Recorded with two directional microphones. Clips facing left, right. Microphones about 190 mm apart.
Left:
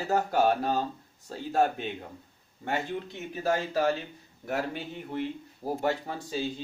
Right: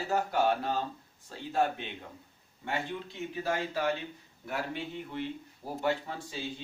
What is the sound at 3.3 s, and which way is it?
A man's voice, 40° left (ahead or behind).